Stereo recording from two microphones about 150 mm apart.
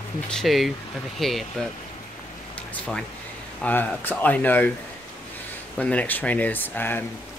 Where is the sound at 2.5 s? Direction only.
10° left (ahead or behind).